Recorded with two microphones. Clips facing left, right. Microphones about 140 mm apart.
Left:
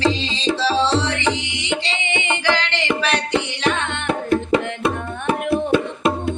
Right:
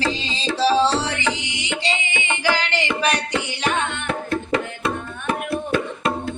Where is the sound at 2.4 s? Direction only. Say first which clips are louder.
Right 1 dB; 10° right (ahead or behind).